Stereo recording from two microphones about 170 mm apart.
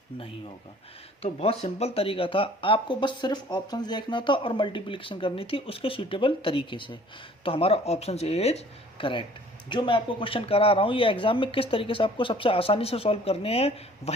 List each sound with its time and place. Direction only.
1.2 s speech: 35° left (ahead or behind)